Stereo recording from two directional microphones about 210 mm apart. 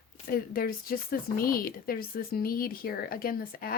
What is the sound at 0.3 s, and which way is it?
Speech, 45° left (ahead or behind).